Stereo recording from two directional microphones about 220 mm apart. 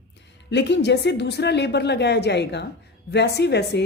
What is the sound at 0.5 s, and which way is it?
A woman's voice, 50° left (ahead or behind).